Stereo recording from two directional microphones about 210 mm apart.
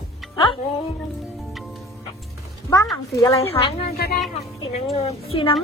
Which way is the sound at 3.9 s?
45° left (ahead or behind).